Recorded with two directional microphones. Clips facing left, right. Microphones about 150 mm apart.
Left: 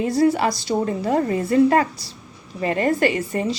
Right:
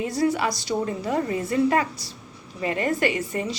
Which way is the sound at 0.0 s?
30° left (ahead or behind).